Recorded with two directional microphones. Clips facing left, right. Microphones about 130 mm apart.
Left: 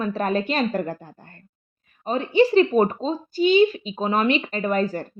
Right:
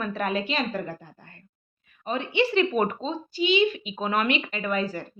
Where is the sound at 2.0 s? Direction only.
40° left (ahead or behind).